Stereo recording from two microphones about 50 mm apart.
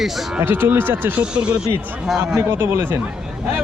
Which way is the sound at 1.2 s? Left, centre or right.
Right.